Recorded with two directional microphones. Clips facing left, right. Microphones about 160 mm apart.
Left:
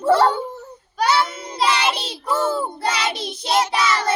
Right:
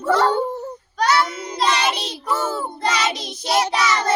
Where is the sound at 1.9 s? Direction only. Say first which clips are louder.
Left 1 dB; 30° left (ahead or behind).